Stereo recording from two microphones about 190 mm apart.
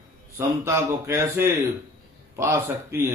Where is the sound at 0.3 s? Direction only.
15° right (ahead or behind).